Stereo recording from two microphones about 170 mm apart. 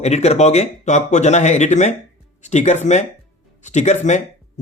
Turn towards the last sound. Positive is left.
turn(degrees=45)  # may be behind; listen again after turning